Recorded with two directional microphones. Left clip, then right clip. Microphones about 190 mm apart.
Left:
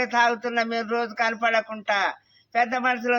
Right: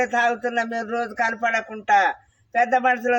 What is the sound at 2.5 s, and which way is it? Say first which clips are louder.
Speech: right 4 dB; 20° left (ahead or behind).